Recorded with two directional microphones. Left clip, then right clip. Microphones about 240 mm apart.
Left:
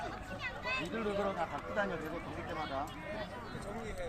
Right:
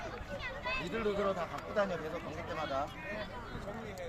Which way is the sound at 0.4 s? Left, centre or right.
Left.